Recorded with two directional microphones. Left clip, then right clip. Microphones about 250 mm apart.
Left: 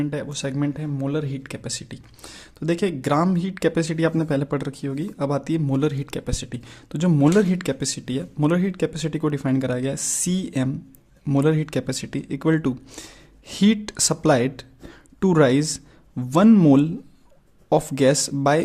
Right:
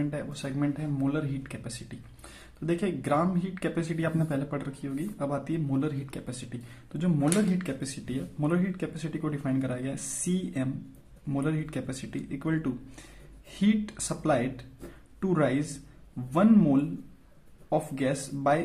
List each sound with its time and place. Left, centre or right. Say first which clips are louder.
0.0 s speech: left 7 dB; left